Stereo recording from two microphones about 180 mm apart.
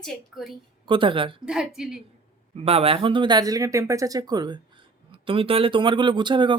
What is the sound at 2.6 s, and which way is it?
Speech, 35° right (ahead or behind).